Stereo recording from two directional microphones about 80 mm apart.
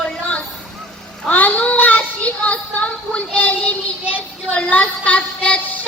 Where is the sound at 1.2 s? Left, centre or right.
Centre.